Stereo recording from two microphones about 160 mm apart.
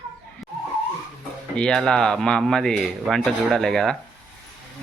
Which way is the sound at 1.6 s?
5° left (ahead or behind).